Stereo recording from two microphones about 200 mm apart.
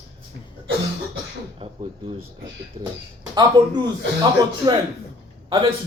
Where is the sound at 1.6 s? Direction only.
30° right (ahead or behind).